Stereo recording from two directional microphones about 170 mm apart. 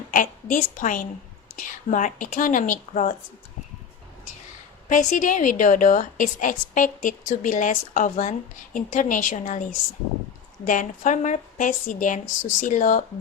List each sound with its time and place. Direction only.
0.1 s a woman's voice: 50° left (ahead or behind)
4.9 s a woman's voice: 50° left (ahead or behind)
10.7 s a woman's voice: 50° left (ahead or behind)